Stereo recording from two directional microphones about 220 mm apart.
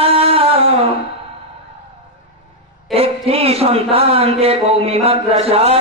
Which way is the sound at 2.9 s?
25° right (ahead or behind).